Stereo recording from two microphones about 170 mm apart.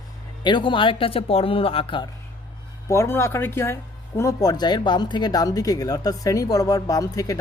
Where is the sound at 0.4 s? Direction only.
30° left (ahead or behind).